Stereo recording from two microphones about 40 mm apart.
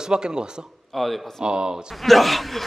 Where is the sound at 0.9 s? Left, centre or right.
Centre.